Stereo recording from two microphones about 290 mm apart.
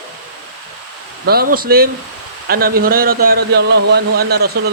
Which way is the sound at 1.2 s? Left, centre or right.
Right.